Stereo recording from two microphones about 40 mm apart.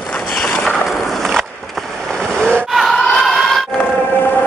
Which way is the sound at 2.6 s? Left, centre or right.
Centre.